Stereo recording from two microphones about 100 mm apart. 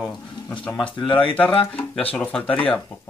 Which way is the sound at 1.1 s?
60° left (ahead or behind).